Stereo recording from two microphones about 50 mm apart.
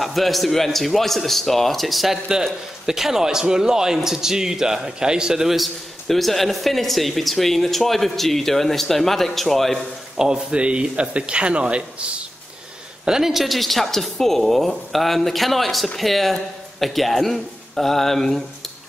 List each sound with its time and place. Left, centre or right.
0.0 s a man's voice: centre
10.1 s a man's voice: centre
13.0 s a man's voice: centre